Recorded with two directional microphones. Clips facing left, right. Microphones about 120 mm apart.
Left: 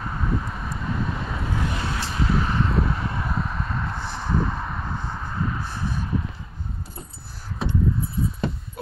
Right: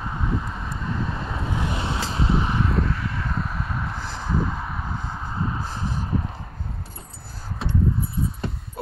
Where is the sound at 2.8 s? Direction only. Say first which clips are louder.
Left 1 dB; 25° left (ahead or behind).